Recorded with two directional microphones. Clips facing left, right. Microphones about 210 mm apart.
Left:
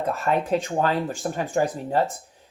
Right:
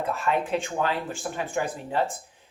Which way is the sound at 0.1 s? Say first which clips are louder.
Left 4 dB; 40° left (ahead or behind).